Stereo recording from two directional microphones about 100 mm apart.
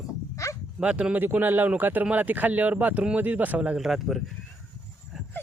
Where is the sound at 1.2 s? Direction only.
20° right (ahead or behind); by 4.2 s centre (ahead or behind).